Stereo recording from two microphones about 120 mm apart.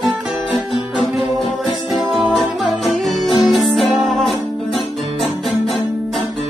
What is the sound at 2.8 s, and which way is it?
Music, centre (ahead or behind).